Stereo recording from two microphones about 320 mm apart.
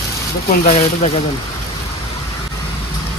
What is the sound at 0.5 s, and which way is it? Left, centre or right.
Speech, left.